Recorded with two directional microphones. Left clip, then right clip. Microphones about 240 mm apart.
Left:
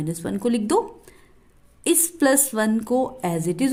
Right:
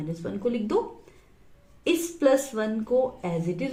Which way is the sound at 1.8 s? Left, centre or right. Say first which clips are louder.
Left 3 dB; left.